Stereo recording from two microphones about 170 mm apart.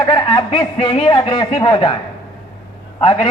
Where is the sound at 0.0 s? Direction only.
30° left (ahead or behind).